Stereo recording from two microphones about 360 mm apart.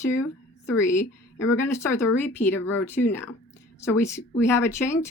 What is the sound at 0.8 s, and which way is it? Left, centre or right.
Speech, centre.